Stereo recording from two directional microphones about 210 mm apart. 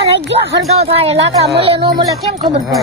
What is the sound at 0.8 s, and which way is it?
Speech, 30° right (ahead or behind).